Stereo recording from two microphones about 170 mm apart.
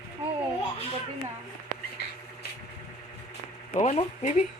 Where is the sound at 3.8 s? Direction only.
45° left (ahead or behind).